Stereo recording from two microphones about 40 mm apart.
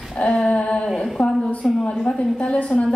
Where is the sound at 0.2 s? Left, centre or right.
Left.